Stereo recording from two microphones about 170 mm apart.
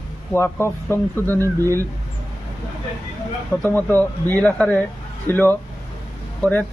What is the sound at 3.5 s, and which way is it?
A man's voice, 10° left (ahead or behind).